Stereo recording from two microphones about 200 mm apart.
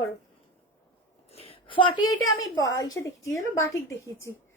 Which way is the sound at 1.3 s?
30° left (ahead or behind).